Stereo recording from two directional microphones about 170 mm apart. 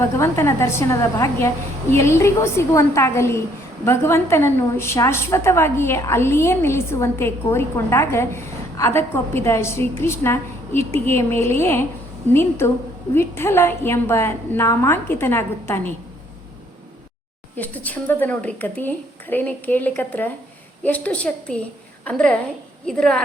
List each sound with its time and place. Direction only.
0.0 s a woman's voice: 15° left (ahead or behind)
17.6 s a woman's voice: 10° left (ahead or behind)